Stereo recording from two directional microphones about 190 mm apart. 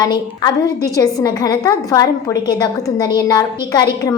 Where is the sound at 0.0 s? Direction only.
20° left (ahead or behind).